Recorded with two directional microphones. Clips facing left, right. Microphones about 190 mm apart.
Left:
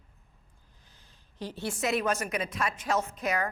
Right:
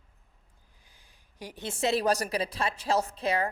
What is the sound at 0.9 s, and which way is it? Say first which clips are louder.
Speech: left 2 dB; 10° right (ahead or behind).